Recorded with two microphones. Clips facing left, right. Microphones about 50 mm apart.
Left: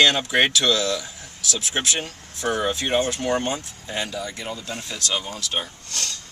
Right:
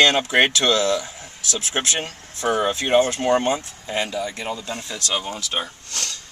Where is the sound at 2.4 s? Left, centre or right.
Centre.